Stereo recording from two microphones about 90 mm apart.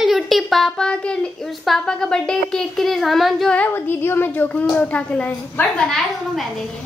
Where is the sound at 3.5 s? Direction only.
20° left (ahead or behind).